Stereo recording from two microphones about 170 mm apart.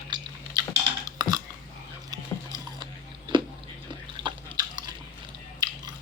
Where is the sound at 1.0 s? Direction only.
20° right (ahead or behind).